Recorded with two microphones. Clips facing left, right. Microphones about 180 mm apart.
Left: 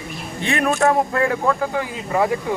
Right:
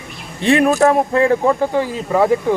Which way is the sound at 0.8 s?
30° right (ahead or behind).